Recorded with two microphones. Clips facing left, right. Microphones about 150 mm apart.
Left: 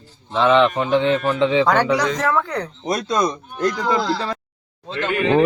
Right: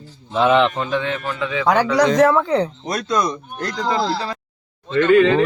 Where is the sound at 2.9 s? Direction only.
25° left (ahead or behind).